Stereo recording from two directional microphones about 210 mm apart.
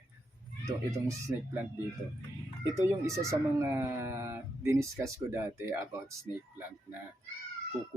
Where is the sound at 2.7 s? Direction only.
15° right (ahead or behind).